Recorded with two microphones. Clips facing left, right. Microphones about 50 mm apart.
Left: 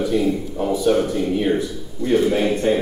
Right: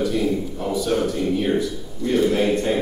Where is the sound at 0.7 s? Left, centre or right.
Centre.